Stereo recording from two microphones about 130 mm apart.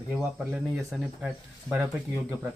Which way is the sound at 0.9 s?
Centre (ahead or behind).